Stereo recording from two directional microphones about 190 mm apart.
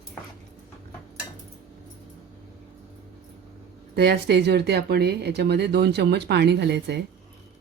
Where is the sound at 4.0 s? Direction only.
60° right (ahead or behind).